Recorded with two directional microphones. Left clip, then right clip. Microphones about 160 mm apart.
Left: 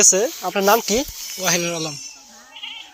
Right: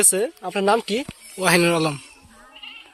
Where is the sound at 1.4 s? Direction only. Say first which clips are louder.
Right 4 dB; 85° right.